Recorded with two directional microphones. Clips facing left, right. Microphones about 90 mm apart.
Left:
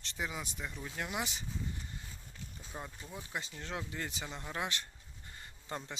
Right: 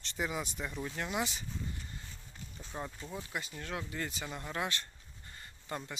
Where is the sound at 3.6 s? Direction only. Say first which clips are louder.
Right 3 dB; 20° left (ahead or behind).